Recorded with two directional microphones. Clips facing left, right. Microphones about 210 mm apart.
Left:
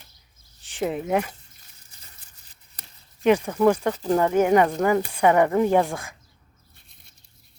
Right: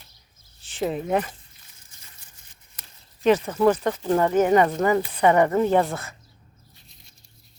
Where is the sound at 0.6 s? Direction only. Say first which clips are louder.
Even; 15° left (ahead or behind).